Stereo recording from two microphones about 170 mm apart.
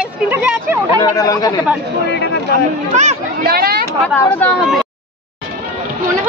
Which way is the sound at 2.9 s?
45° right (ahead or behind).